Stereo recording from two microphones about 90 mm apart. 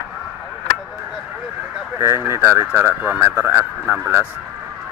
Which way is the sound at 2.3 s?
30° right (ahead or behind).